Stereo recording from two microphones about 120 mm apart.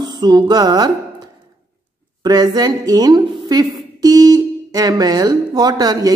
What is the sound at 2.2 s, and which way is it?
Speech, 35° right (ahead or behind).